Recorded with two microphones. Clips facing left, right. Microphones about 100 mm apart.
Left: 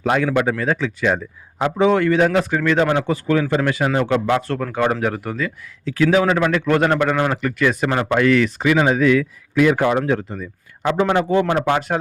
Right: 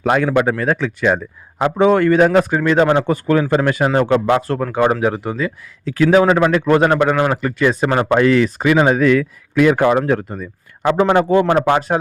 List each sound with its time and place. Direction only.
0.0 s a man's voice: 55° right (ahead or behind)
0.3 s a man's voice: 40° right (ahead or behind)
4.6 s speech: 25° right (ahead or behind)
5.4 s a man's voice: 35° right (ahead or behind)
6.7 s speech: 25° right (ahead or behind)
7.4 s speech: 30° right (ahead or behind); by 11.9 s 45° right (ahead or behind)